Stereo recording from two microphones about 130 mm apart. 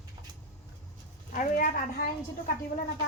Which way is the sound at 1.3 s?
90° left.